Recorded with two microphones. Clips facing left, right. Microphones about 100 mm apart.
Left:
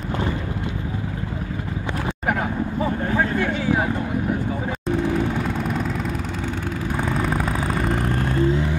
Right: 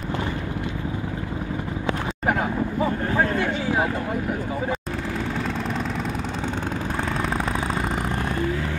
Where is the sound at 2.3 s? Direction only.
15° right (ahead or behind).